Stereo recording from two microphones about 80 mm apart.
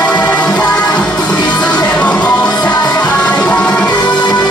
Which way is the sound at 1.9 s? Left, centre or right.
Centre.